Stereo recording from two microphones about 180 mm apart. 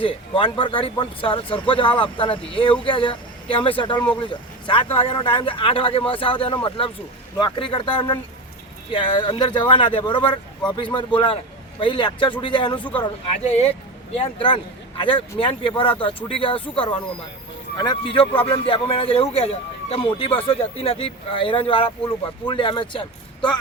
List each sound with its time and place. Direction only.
0.0 s speech: 30° left (ahead or behind)